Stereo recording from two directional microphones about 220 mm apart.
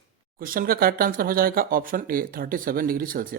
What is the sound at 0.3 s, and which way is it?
Speech, 40° right (ahead or behind).